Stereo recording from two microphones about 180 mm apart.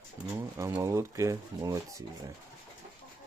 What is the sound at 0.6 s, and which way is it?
Speech, 15° right (ahead or behind).